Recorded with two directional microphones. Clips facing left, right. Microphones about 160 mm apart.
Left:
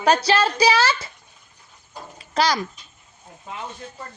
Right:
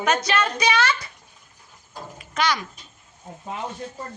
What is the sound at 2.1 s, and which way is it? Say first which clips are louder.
Speech: left 3 dB; 35° left (ahead or behind).